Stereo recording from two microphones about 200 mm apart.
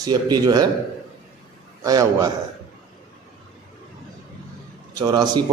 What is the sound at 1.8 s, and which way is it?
Speech, 15° right (ahead or behind).